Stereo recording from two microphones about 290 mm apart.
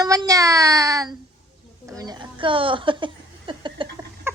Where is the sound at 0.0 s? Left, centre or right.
Centre.